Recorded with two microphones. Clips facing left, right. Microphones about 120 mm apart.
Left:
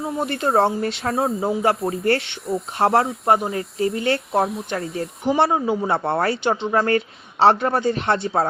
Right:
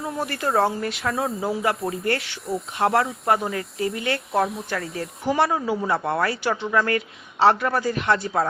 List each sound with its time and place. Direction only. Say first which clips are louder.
0.2 s speech: left 3 dB; 25° left (ahead or behind)
4.3 s a woman's voice: left 2 dB; centre (ahead or behind)
4.7 s speech: left 3 dB; 25° left (ahead or behind)